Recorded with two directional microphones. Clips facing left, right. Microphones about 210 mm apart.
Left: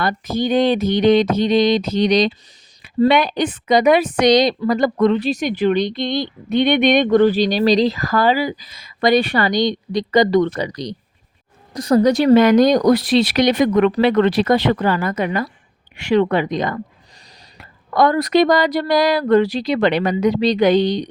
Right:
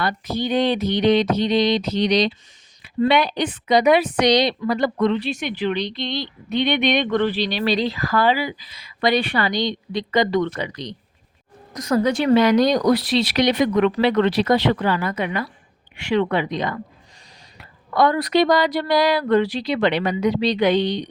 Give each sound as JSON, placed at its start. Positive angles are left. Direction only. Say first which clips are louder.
{"t": 0.0, "sound": "a woman's voice", "louder": "left 4 dB", "side_deg": 45}